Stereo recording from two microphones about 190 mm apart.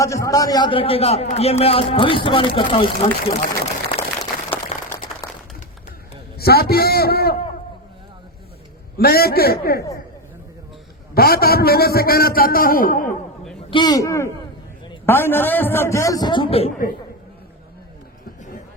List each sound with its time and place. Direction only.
0.0 s a man's voice: 15° left (ahead or behind); by 4.0 s 30° left (ahead or behind)
4.7 s a sound: 35° left (ahead or behind)
6.4 s a man's voice: 55° left (ahead or behind)
9.0 s a man's voice: 55° left (ahead or behind)
11.1 s a man's voice: 55° left (ahead or behind)
13.7 s a man's voice: 25° left (ahead or behind)